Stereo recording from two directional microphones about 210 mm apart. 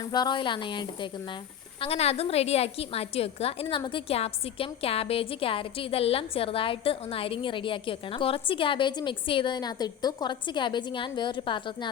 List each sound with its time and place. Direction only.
0.1 s a woman's voice: 20° left (ahead or behind)